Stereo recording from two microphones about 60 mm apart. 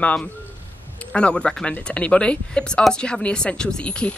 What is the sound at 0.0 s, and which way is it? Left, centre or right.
Speech, left.